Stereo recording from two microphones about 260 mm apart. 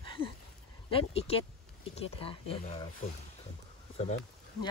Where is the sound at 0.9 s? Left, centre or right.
Left.